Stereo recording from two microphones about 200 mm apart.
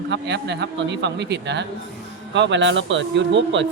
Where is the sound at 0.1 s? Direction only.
60° right (ahead or behind).